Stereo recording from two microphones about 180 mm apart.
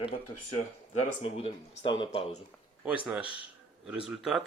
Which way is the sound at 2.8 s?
5° right (ahead or behind).